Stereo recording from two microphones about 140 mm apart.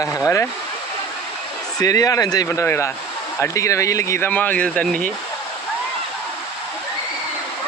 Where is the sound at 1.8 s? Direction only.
25° left (ahead or behind); by 5.0 s 5° left (ahead or behind).